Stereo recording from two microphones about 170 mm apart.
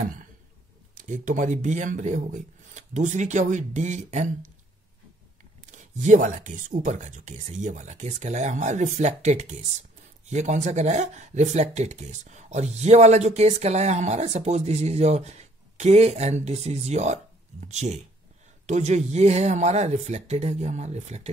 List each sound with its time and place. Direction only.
0.9 s speech: 45° right (ahead or behind)
5.7 s speech: 45° right (ahead or behind)